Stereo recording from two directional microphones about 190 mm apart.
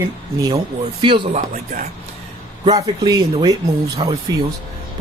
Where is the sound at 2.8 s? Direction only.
20° right (ahead or behind).